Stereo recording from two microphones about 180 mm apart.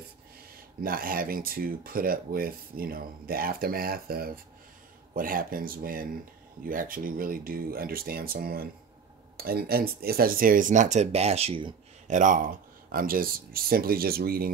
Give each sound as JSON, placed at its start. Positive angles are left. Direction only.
{"t": 0.6, "sound": "speech", "side_deg": -55}
{"t": 12.1, "sound": "speech", "side_deg": -45}